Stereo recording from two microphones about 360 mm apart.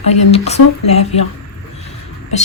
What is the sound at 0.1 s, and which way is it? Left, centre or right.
Speech, centre.